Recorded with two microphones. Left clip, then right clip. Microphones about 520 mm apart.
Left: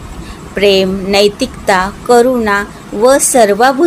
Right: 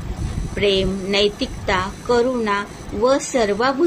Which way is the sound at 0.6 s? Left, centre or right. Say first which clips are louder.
Left 9 dB; right.